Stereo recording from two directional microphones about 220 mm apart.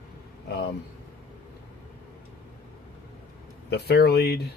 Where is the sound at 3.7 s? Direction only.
45° left (ahead or behind).